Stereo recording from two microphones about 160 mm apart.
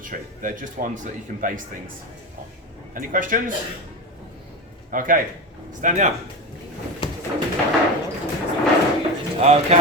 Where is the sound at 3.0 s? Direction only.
55° right (ahead or behind).